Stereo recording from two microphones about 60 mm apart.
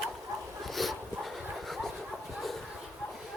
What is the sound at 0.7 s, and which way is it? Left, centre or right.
Dog, centre.